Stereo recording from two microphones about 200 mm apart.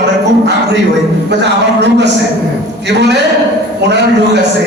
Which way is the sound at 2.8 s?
60° right (ahead or behind).